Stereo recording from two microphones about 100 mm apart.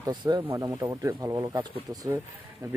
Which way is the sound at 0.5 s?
30° right (ahead or behind).